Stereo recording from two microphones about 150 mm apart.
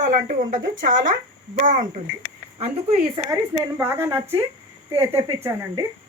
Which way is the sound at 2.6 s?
40° right (ahead or behind).